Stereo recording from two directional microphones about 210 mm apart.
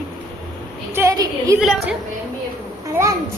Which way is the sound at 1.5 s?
5° right (ahead or behind).